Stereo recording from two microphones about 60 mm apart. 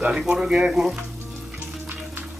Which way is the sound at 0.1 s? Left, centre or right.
Centre.